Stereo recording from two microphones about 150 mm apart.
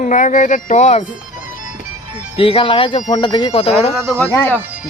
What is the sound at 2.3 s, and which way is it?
Speech, 35° left (ahead or behind).